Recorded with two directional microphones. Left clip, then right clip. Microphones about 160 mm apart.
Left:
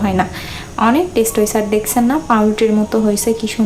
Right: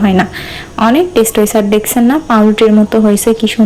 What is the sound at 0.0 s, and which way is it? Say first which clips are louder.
A woman's voice: right 5 dB; 20° right (ahead or behind).